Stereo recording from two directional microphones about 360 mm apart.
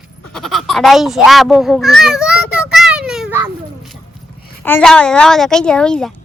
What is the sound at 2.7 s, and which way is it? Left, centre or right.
Children playing, centre.